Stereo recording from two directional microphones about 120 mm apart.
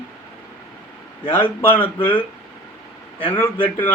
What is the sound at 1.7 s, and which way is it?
Speech, 50° left (ahead or behind).